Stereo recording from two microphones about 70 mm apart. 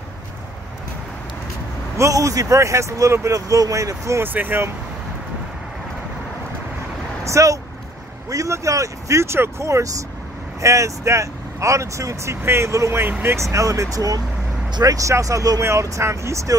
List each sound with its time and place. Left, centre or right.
2.0 s speech: right
4.2 s speech: right
7.2 s speech: right